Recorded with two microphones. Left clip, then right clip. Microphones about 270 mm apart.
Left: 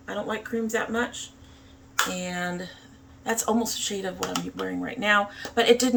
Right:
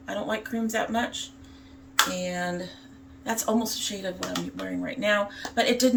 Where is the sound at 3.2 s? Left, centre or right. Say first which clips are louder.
Left 1 dB; centre.